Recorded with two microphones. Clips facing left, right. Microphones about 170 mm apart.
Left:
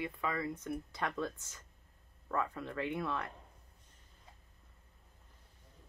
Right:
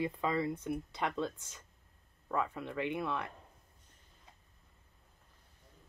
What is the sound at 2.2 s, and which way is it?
Speech, 15° right (ahead or behind).